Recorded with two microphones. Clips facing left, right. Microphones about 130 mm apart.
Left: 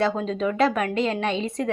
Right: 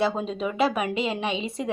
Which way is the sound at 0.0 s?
10° right (ahead or behind).